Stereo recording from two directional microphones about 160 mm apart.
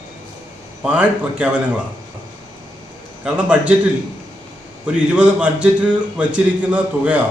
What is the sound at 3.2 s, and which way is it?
Speech, 10° right (ahead or behind).